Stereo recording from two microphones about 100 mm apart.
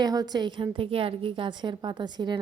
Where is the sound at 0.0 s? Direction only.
40° right (ahead or behind).